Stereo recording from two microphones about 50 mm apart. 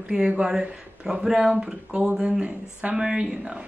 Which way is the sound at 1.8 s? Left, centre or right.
Right.